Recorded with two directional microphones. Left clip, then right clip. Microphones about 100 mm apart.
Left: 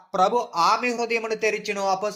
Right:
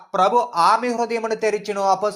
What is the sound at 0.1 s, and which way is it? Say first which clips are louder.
A man's voice: right 4 dB; 20° right (ahead or behind).